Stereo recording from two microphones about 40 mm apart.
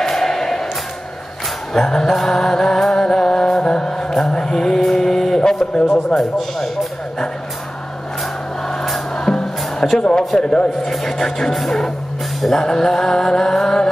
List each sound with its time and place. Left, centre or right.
0.0 s music: centre
1.7 s music: centre
3.6 s mantra: centre
6.1 s speech: centre
9.1 s music: centre
10.1 s a man's voice: centre
10.9 s music: centre